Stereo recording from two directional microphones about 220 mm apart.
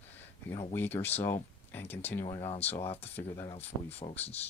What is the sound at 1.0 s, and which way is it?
Speech, 10° left (ahead or behind).